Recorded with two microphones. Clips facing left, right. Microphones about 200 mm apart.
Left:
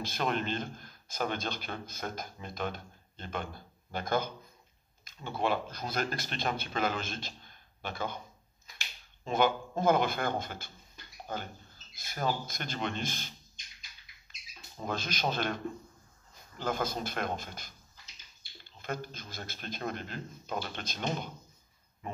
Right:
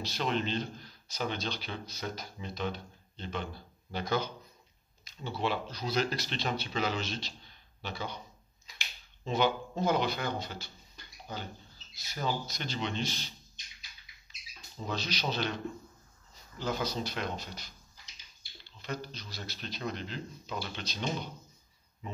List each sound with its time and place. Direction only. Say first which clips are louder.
0.0 s a man's voice: even; 50° left (ahead or behind)
9.2 s a man's voice: left 1 dB; 50° left (ahead or behind)
14.9 s a man's voice: left 1 dB; 50° left (ahead or behind)